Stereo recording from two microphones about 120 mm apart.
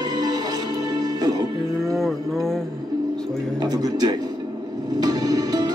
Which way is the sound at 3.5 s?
30° right (ahead or behind).